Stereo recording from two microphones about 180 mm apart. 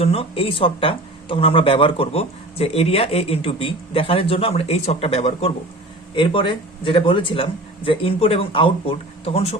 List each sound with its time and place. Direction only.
0.0 s a man's voice: 35° left (ahead or behind)